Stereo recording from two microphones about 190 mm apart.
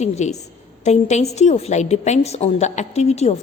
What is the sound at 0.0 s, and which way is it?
A woman's voice, 35° left (ahead or behind).